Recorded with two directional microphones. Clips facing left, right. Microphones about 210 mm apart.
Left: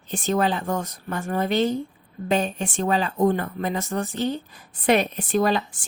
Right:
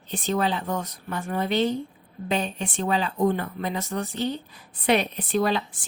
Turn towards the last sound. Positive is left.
turn(degrees=45)  # may be behind; listen again after turning